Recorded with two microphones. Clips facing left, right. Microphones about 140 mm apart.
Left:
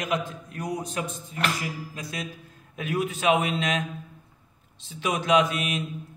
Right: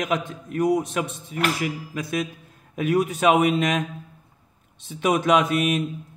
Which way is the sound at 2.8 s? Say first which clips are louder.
Right 5 dB; 50° right (ahead or behind).